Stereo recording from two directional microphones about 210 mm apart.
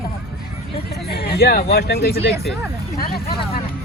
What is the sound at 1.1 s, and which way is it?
Speech, 50° left (ahead or behind).